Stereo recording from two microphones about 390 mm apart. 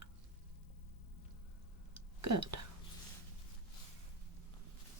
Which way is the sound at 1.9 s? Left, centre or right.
Right.